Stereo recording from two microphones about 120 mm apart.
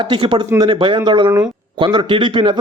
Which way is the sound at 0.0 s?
45° right (ahead or behind).